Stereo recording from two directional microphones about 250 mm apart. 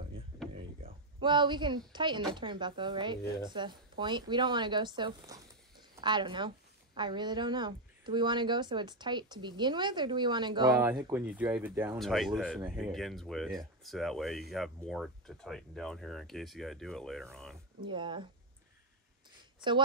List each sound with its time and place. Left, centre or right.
1.2 s speech: centre
17.8 s speech: centre